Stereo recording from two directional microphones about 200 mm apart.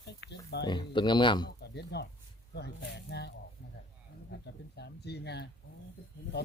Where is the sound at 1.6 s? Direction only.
55° left (ahead or behind).